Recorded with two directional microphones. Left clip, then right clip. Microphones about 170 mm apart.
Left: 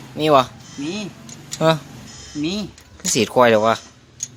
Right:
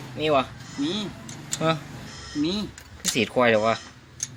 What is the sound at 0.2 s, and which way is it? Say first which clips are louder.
Speech: left 8 dB; 45° left (ahead or behind).